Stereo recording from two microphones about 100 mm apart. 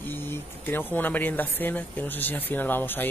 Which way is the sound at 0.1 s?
20° left (ahead or behind).